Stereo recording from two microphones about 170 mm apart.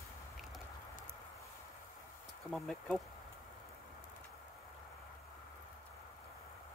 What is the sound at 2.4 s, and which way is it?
Speech, centre (ahead or behind).